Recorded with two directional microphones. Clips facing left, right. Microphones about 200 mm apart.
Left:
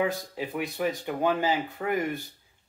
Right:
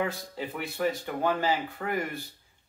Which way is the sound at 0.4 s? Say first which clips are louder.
Even; 15° left (ahead or behind).